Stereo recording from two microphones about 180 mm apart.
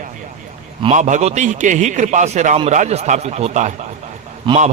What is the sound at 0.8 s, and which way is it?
A man's voice, 40° right (ahead or behind).